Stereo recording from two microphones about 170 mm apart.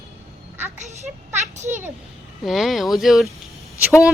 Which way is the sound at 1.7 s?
15° right (ahead or behind).